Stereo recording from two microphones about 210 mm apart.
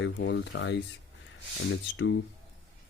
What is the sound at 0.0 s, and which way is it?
A man's voice, 60° left (ahead or behind).